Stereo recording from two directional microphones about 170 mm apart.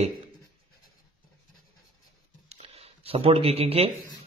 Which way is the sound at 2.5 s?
35° right (ahead or behind).